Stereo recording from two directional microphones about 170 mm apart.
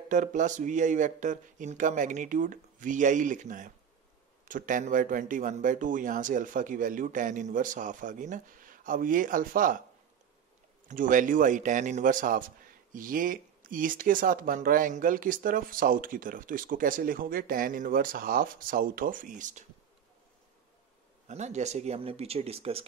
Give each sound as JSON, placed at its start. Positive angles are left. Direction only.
{"t": 0.1, "sound": "speech", "side_deg": -50}
{"t": 10.9, "sound": "speech", "side_deg": -50}
{"t": 21.3, "sound": "speech", "side_deg": -40}